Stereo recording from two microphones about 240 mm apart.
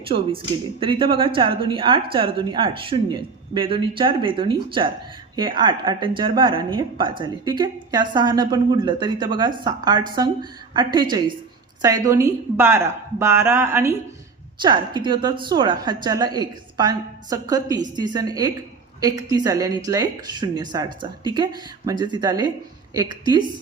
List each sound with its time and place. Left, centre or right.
0.8 s a woman's voice: right